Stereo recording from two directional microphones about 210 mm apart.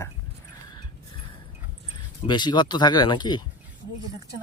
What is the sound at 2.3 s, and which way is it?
Speech, 20° left (ahead or behind).